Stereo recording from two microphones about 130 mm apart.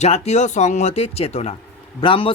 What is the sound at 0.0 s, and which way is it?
Speech, 60° left (ahead or behind).